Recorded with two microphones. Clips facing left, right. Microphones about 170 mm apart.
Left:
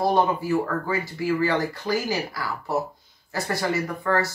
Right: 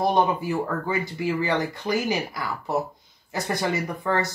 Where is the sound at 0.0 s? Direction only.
20° right (ahead or behind).